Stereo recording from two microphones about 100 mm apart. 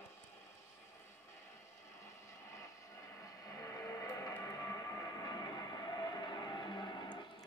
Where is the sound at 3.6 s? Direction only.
35° left (ahead or behind).